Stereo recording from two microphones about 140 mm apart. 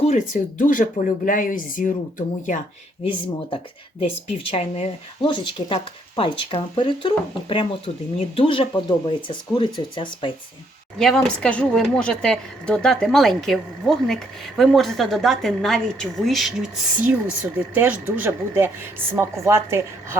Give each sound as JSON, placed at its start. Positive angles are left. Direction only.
{"t": 0.0, "sound": "speech", "side_deg": 60}
{"t": 3.0, "sound": "speech", "side_deg": 40}
{"t": 10.9, "sound": "speech", "side_deg": 5}
{"t": 17.4, "sound": "speech", "side_deg": -10}